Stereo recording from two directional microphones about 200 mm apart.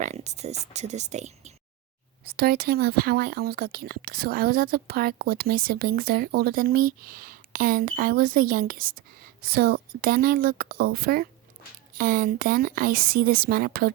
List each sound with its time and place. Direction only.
0.0 s speech: 35° right (ahead or behind)
2.2 s speech: 50° right (ahead or behind)